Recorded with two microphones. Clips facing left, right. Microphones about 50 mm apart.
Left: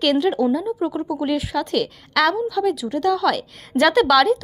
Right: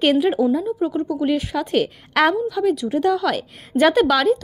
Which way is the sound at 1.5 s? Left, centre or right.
Right.